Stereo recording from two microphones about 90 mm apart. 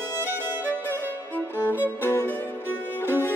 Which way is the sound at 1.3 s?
25° left (ahead or behind).